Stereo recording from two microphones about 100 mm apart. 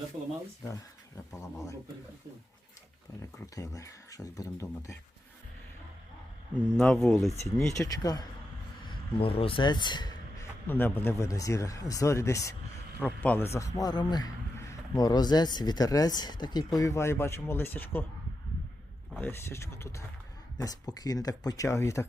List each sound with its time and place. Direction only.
0.7 s speech: 30° left (ahead or behind)
3.2 s speech: 35° left (ahead or behind)
6.7 s speech: 5° left (ahead or behind)
7.2 s speech: 30° left (ahead or behind)
8.9 s speech: 65° left (ahead or behind); by 10.2 s 50° left (ahead or behind)
10.7 s speech: 20° left (ahead or behind); by 14.3 s 45° left (ahead or behind)
14.6 s speech: 35° left (ahead or behind)
19.2 s speech: 25° left (ahead or behind)
20.6 s speech: 40° left (ahead or behind)